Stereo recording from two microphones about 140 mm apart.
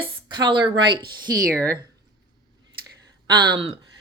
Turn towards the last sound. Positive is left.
turn(degrees=-40)  # may be behind; listen again after turning